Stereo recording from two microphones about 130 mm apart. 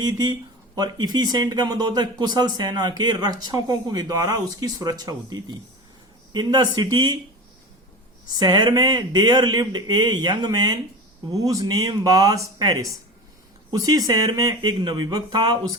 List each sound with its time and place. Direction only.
0.0 s speech: 35° right (ahead or behind)
8.3 s speech: 30° right (ahead or behind)